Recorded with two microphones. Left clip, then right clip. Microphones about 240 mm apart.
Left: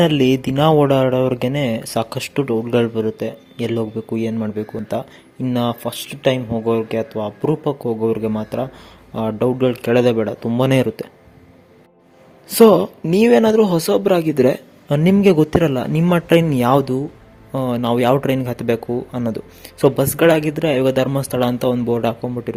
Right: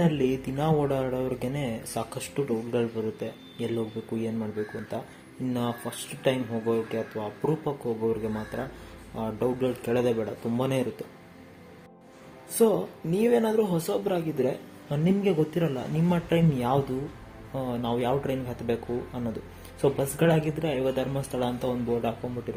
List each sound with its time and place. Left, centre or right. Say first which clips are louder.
0.0 s speech: left 11 dB; left
12.5 s speech: left 13 dB; left